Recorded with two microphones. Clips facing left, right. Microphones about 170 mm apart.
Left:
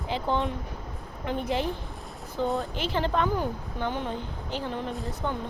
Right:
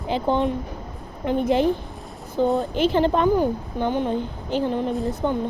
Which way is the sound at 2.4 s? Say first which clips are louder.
Right 7 dB; 15° right (ahead or behind).